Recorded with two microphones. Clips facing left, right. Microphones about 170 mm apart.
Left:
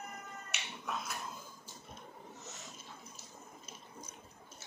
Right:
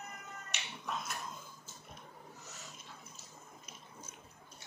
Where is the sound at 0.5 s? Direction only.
Centre (ahead or behind).